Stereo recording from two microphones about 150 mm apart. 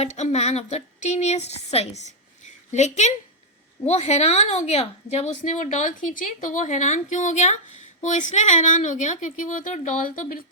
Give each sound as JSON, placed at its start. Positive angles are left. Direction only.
{"t": 0.0, "sound": "a woman's voice", "side_deg": 50}